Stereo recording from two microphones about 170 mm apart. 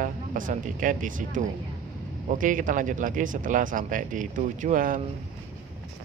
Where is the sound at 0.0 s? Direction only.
50° right (ahead or behind).